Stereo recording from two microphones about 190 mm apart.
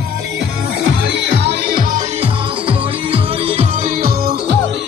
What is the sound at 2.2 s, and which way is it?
Music, 30° right (ahead or behind).